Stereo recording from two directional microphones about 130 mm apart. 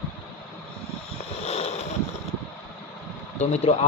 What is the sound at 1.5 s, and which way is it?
Boat, 55° left (ahead or behind).